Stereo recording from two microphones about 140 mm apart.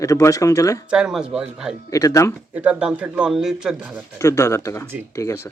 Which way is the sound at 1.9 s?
25° left (ahead or behind).